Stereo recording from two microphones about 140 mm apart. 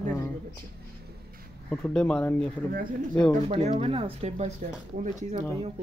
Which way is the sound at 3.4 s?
50° right (ahead or behind).